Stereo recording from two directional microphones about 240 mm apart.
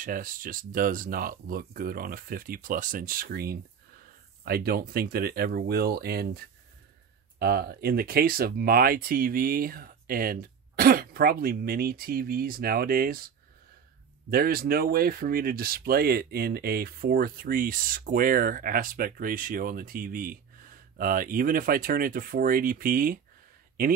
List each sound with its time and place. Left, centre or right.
0.0 s speech: right
14.3 s speech: right